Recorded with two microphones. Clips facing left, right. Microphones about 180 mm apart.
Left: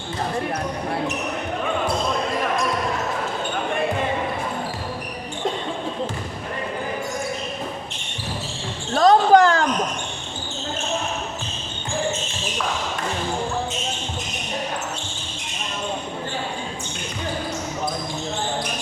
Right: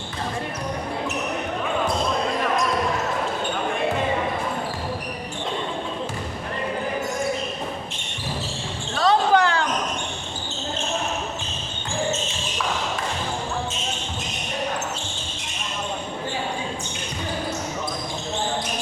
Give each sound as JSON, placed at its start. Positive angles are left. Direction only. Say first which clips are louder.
{"t": 9.0, "sound": "basketball bounce", "louder": "left 5 dB", "side_deg": 45}